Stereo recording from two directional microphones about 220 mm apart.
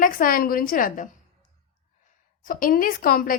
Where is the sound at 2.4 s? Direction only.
40° left (ahead or behind).